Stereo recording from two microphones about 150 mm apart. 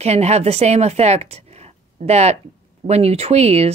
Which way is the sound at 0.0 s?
45° right (ahead or behind).